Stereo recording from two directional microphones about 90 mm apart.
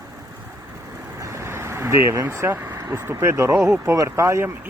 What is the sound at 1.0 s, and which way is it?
Vehicle, 35° right (ahead or behind).